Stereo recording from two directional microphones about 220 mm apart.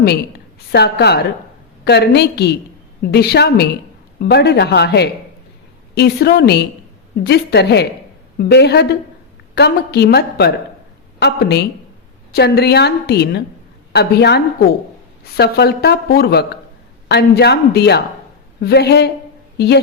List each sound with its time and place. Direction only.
0.7 s a woman's voice: 50° left (ahead or behind)